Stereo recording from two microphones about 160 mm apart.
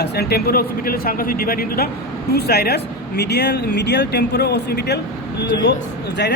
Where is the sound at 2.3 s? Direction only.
80° left.